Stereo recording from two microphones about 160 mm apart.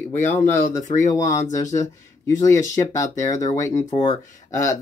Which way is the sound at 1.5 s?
20° left (ahead or behind).